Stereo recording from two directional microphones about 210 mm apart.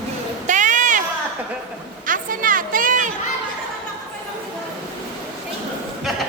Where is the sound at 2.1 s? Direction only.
40° right (ahead or behind).